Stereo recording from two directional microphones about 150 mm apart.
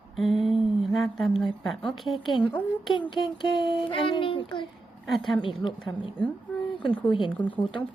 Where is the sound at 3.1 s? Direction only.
30° left (ahead or behind).